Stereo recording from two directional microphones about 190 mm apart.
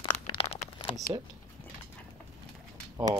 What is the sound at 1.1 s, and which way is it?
Speech, 25° right (ahead or behind).